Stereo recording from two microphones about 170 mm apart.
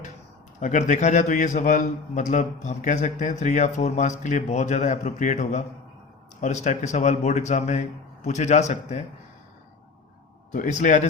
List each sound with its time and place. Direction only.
0.6 s a man's voice: 45° left (ahead or behind)
10.5 s a man's voice: 50° left (ahead or behind)